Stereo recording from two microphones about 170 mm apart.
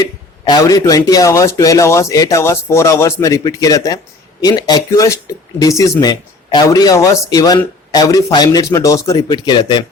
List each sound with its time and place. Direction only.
0.0 s speech: 25° left (ahead or behind)